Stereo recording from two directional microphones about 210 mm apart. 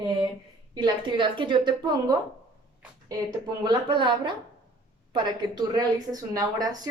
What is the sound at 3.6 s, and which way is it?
Speech, 20° right (ahead or behind).